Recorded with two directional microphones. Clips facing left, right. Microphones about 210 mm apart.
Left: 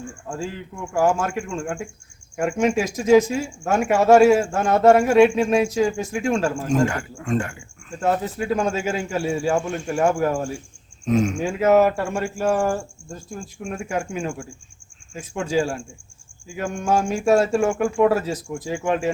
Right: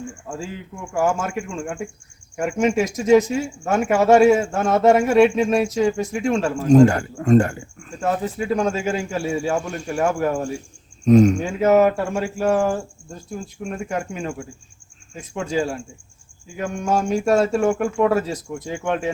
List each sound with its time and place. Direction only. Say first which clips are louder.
0.3 s speech: left 4 dB; 5° right (ahead or behind)
6.7 s a man's voice: right 13 dB; 35° right (ahead or behind)
8.0 s speech: even; centre (ahead or behind)
9.9 s speech: even; 5° right (ahead or behind)
11.0 s speech: right 7 dB; 40° right (ahead or behind)
11.3 s speech: right 1 dB; 5° left (ahead or behind)
13.8 s speech: left 1 dB; 5° left (ahead or behind)